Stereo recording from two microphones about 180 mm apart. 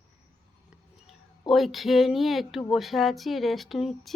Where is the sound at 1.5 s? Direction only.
Centre (ahead or behind).